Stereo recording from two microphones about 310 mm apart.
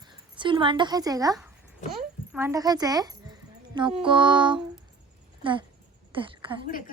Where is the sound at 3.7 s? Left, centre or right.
Centre.